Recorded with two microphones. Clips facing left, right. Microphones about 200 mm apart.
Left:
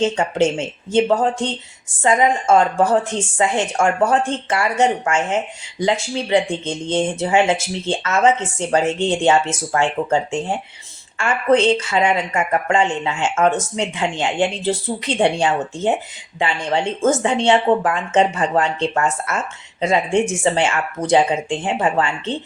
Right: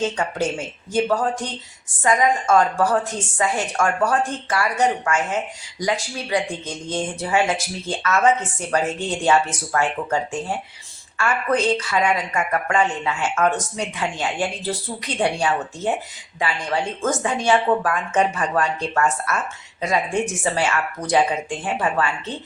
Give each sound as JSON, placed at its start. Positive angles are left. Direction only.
{"t": 0.0, "sound": "speech", "side_deg": 25}